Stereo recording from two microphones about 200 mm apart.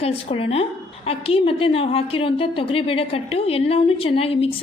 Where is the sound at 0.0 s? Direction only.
30° left (ahead or behind).